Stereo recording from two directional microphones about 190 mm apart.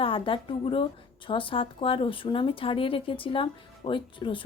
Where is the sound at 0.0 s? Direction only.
30° left (ahead or behind).